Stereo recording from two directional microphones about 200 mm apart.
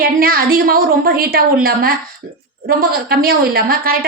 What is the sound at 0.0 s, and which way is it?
A woman's voice, 45° right (ahead or behind).